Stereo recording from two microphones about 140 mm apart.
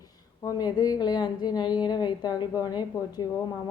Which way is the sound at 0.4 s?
25° left (ahead or behind).